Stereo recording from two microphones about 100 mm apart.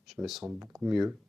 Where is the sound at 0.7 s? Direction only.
5° right (ahead or behind).